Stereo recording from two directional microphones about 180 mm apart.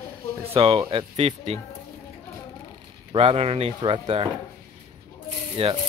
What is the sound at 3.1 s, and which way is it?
Speech, 35° right (ahead or behind).